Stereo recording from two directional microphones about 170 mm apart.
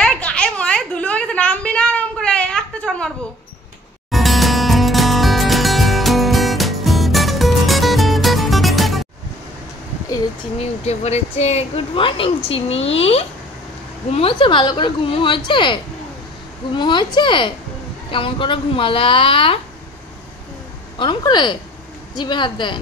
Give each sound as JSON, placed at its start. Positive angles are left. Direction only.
{"t": 0.0, "sound": "a sound", "side_deg": 5}
{"t": 4.1, "sound": "music", "side_deg": 0}
{"t": 10.6, "sound": "a woman's voice", "side_deg": 40}
{"t": 21.0, "sound": "a woman's voice", "side_deg": 25}